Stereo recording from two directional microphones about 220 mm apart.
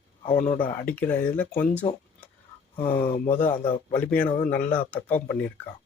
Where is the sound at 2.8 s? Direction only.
30° left (ahead or behind).